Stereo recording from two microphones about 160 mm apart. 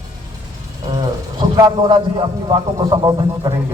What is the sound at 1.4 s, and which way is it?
A man's voice, 25° right (ahead or behind).